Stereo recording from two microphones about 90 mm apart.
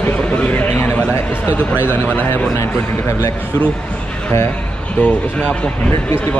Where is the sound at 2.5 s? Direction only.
35° left (ahead or behind).